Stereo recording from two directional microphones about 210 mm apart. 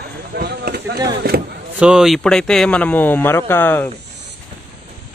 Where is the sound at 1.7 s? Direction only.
5° right (ahead or behind).